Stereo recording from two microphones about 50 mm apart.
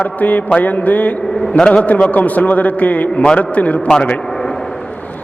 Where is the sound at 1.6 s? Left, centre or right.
Left.